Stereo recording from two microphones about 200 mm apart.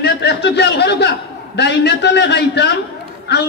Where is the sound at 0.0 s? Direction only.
55° left (ahead or behind).